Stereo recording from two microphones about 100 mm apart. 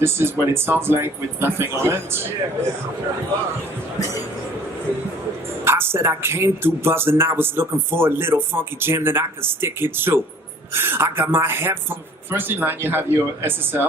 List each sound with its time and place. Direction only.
0.0 s a man's voice: 25° right (ahead or behind)
5.6 s a man's voice: 25° right (ahead or behind)